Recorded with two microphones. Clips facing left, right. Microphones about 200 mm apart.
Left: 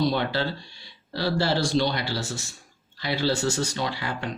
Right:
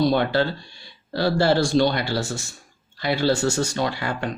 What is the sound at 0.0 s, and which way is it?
Speech, 50° right (ahead or behind).